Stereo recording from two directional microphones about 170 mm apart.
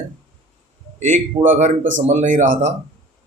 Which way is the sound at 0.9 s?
45° right (ahead or behind).